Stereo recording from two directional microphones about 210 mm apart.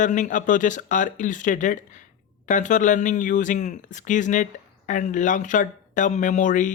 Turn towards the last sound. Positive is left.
turn(degrees=35)  # may be behind; listen again after turning